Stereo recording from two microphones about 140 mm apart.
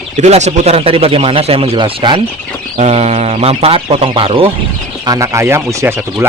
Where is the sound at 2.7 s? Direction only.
50° right (ahead or behind).